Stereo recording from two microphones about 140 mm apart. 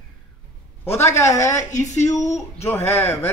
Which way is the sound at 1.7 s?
60° left (ahead or behind).